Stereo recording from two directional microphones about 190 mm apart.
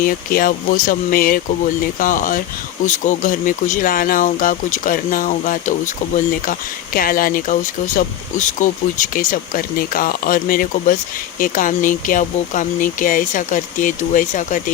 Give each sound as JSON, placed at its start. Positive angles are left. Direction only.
{"t": 0.0, "sound": "speech", "side_deg": 45}